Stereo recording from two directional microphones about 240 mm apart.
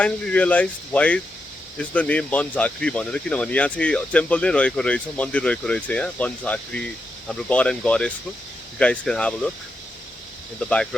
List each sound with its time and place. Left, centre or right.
0.0 s speech: centre